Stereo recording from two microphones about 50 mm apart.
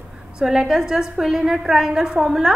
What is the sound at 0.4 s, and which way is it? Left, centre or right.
A woman's voice, centre.